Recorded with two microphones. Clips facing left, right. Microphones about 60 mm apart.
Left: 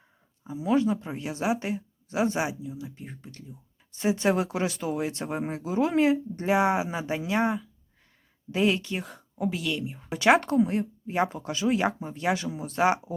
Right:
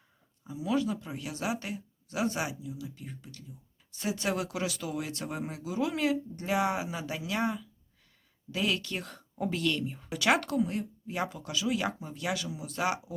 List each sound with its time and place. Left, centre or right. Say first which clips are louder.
0.4 s speech: left 6 dB; left; by 10.1 s centre
10.1 s speech: left 6 dB; left